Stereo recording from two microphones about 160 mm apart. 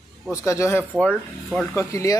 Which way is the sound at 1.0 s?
5° left (ahead or behind).